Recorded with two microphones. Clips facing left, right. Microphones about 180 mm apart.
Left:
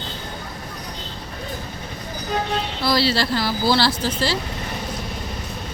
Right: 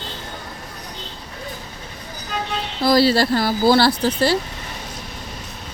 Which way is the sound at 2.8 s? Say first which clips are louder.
Right 6 dB; 50° right (ahead or behind).